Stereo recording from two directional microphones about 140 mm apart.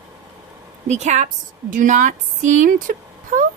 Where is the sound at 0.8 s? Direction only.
55° right (ahead or behind).